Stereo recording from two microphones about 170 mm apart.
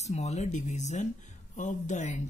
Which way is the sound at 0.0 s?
40° left (ahead or behind).